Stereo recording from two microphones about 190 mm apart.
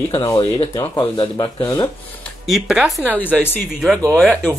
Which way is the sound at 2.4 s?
Centre (ahead or behind).